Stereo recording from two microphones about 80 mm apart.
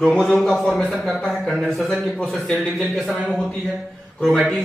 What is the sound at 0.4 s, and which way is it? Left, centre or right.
Speech, centre.